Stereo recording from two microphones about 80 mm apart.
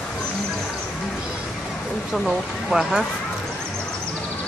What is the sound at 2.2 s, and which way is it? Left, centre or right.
Speech, centre.